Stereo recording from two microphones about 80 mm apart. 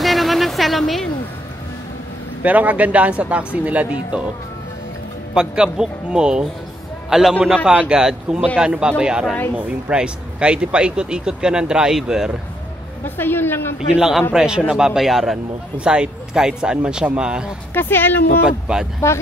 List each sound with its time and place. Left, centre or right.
0.0 s a sound: centre
2.4 s speech: centre
5.3 s a man's voice: centre
13.0 s a woman's voice: left
13.7 s speech: centre
17.7 s a woman's voice: left
18.4 s speech: centre